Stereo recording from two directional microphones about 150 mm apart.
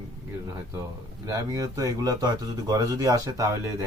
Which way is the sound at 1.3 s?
25° right (ahead or behind).